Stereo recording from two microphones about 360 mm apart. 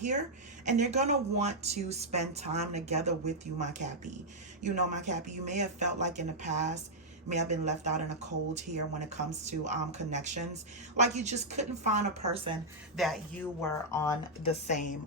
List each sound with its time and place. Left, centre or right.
0.6 s a woman's voice: centre
13.0 s speech: centre